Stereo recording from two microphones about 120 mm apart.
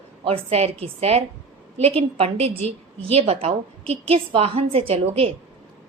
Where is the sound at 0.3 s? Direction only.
60° right (ahead or behind).